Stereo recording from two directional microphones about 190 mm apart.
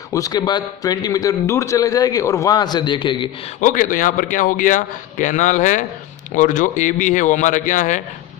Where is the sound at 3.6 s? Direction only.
45° left (ahead or behind).